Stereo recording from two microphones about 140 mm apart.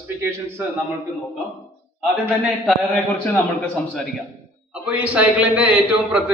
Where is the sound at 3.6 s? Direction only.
10° left (ahead or behind).